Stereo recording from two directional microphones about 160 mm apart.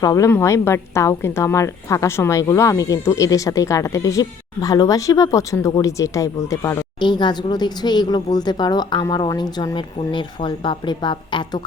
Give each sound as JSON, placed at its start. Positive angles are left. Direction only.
{"t": 0.0, "sound": "a woman's voice", "side_deg": 20}